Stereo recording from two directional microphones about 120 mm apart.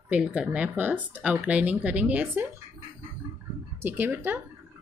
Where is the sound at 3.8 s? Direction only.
20° right (ahead or behind).